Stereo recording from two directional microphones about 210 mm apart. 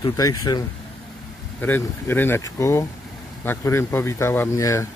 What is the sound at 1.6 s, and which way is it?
Speech, 10° left (ahead or behind).